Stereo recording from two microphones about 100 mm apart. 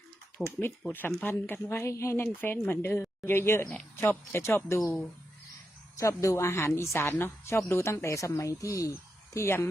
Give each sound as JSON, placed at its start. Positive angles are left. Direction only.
{"t": 0.4, "sound": "speech", "side_deg": 15}
{"t": 6.0, "sound": "speech", "side_deg": 30}